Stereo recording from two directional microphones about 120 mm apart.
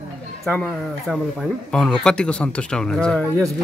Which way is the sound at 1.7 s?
5° left (ahead or behind).